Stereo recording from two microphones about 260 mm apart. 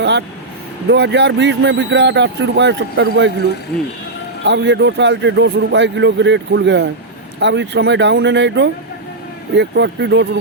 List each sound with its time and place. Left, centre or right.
0.0 s vehicle: right
0.9 s speech: right
4.4 s speech: right